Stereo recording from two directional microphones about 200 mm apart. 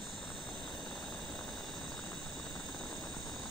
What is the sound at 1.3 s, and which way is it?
Vehicle, centre (ahead or behind).